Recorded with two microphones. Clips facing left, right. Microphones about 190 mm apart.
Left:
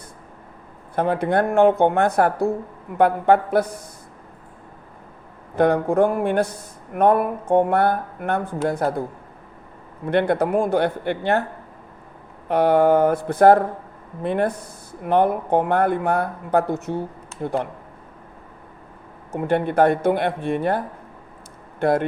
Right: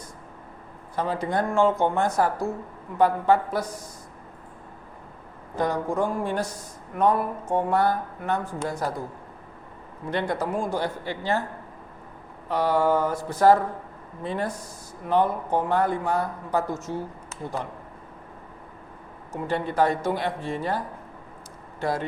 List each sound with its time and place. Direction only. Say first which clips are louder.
0.9 s speech: left 6 dB; 60° left (ahead or behind)
5.5 s speech: left 8 dB; 60° left (ahead or behind)
10.1 s speech: left 8 dB; 60° left (ahead or behind)
12.5 s speech: left 6 dB; 60° left (ahead or behind)
19.3 s speech: left 7 dB; 55° left (ahead or behind)